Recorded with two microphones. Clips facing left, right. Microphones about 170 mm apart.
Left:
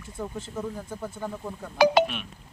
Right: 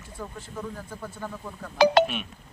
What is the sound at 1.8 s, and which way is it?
Speech, centre (ahead or behind).